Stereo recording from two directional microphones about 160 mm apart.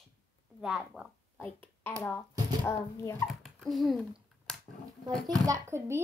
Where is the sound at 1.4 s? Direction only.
10° left (ahead or behind).